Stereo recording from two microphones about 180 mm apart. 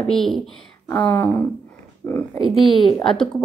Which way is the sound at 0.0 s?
Centre (ahead or behind).